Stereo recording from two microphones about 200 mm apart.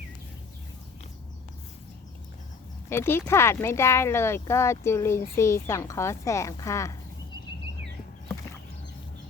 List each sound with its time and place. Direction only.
2.9 s a woman's voice: 10° left (ahead or behind)